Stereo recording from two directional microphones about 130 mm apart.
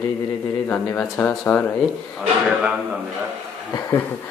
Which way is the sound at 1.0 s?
15° left (ahead or behind).